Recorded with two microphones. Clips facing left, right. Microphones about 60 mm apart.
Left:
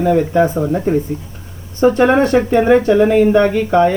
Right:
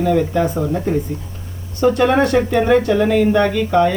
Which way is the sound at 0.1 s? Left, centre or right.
Left.